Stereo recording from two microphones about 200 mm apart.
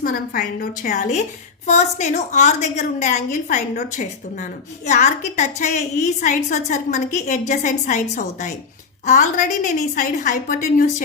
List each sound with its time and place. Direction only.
0.0 s a woman's voice: 45° left (ahead or behind)